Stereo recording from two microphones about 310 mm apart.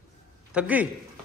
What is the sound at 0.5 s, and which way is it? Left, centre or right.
Speech, centre.